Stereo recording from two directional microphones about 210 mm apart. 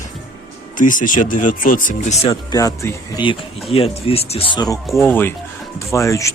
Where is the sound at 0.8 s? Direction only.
40° left (ahead or behind).